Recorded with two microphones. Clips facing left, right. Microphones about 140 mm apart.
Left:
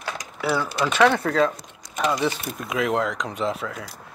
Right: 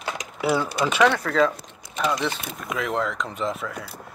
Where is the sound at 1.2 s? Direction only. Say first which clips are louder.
Left 1 dB; 30° left (ahead or behind).